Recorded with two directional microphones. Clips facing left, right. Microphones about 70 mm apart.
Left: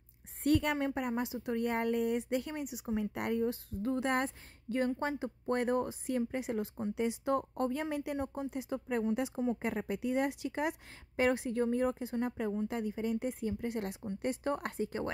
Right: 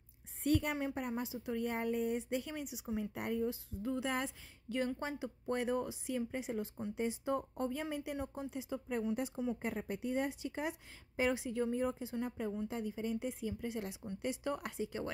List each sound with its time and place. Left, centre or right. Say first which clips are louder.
0.4 s a woman's voice: left 4 dB; left
3.0 s a woman's voice: left 4 dB; left
4.6 s a woman's voice: left 5 dB; left
7.9 s a woman's voice: left 4 dB; left
9.1 s a woman's voice: left 4 dB; left
9.6 s a woman's voice: left 4 dB; left